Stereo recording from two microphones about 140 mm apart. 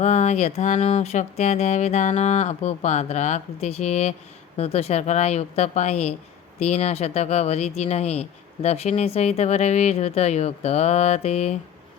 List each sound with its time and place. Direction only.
0.0 s speech: 50° left (ahead or behind)
0.8 s speech: 45° left (ahead or behind)